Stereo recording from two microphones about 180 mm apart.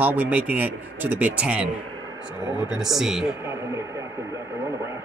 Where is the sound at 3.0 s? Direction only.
Centre (ahead or behind).